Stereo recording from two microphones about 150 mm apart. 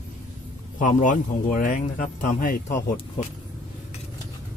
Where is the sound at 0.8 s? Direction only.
60° left (ahead or behind).